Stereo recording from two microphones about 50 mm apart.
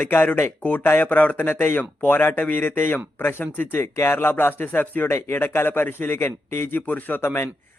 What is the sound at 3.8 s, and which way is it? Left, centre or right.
A man's voice, left.